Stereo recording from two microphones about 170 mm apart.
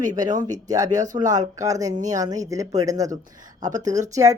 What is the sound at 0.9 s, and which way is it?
Speech, 45° right (ahead or behind).